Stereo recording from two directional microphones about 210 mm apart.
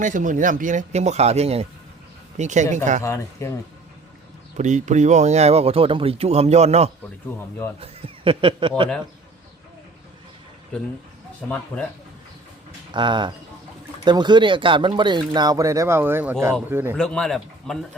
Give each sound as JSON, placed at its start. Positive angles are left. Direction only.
{"t": 0.0, "sound": "speech", "side_deg": -35}
{"t": 3.0, "sound": "speech", "side_deg": 15}
{"t": 4.5, "sound": "speech", "side_deg": -35}
{"t": 12.9, "sound": "speech", "side_deg": -20}
{"t": 17.0, "sound": "a man's voice", "side_deg": 5}